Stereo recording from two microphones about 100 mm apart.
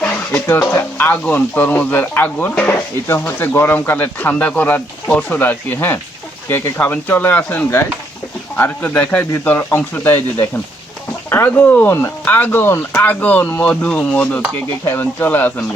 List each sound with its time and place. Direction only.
0.7 s speech: 20° left (ahead or behind)